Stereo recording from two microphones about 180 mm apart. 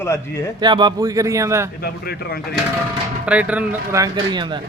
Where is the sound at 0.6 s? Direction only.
25° right (ahead or behind).